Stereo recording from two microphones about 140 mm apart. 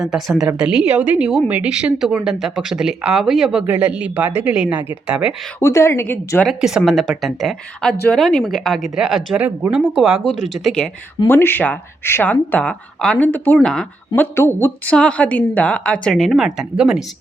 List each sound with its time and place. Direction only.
0.0 s speech: centre (ahead or behind)
5.5 s speech: 20° left (ahead or behind)
6.4 s speech: centre (ahead or behind)
11.3 s speech: 15° left (ahead or behind)
14.2 s speech: 15° left (ahead or behind); by 17.0 s 5° right (ahead or behind)